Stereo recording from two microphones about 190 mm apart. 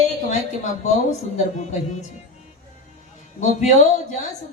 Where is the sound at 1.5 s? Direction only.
40° left (ahead or behind).